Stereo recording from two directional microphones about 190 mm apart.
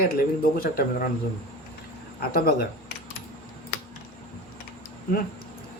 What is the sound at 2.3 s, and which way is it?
Speech, 55° left (ahead or behind).